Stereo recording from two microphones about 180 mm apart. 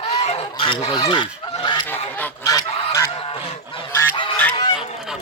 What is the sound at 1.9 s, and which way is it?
Honk, 15° left (ahead or behind).